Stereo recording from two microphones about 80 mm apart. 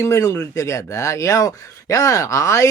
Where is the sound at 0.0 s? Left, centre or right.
Left.